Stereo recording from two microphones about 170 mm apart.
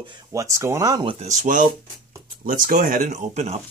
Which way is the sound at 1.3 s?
45° right (ahead or behind).